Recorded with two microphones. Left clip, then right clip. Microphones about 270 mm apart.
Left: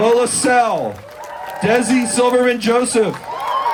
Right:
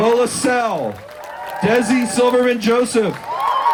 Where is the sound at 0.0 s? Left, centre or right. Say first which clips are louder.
Left 1 dB; left.